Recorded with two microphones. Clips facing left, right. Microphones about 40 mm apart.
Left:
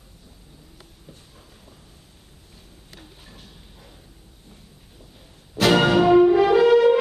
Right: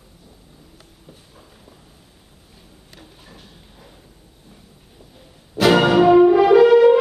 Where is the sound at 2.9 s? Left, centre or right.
Centre.